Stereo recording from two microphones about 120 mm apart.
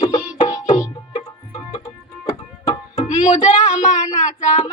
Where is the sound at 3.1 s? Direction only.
90° left.